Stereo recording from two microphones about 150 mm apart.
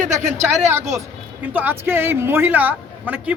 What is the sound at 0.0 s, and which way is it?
Speech, 55° right (ahead or behind).